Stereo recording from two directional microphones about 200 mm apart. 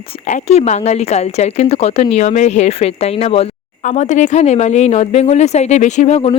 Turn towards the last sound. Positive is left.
turn(degrees=30)  # may be behind; listen again after turning